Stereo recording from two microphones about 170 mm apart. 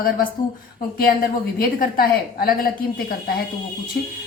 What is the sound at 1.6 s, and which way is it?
A woman's voice, 60° left (ahead or behind).